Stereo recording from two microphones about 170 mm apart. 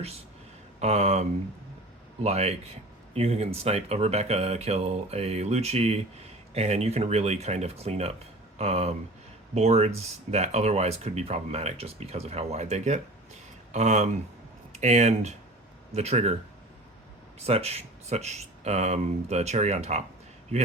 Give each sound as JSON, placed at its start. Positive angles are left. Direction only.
{"t": 0.8, "sound": "speech", "side_deg": -40}
{"t": 17.4, "sound": "speech", "side_deg": -35}